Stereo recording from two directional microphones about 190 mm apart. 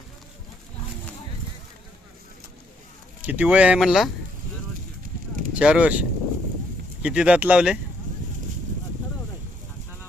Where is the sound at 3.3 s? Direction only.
10° right (ahead or behind).